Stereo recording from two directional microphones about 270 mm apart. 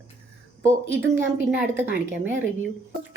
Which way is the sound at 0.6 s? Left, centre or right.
Centre.